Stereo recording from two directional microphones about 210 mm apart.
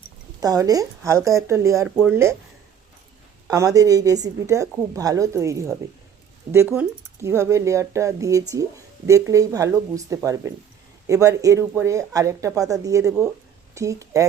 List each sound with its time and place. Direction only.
0.3 s a woman's voice: 15° right (ahead or behind)
3.4 s a woman's voice: 15° right (ahead or behind)